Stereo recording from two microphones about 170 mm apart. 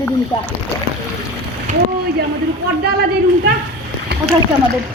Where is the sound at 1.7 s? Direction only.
45° right (ahead or behind).